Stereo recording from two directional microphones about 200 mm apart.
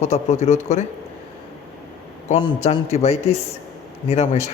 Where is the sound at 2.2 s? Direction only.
35° left (ahead or behind).